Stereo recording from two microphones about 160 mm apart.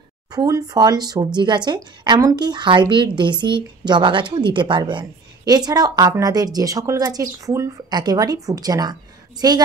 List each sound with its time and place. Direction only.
0.3 s speech: 25° right (ahead or behind)